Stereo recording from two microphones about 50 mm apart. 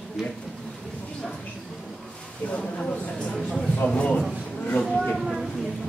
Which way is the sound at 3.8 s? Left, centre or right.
Left.